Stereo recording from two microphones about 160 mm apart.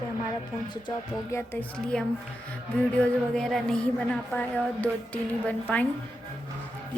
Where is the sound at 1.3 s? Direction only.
10° left (ahead or behind).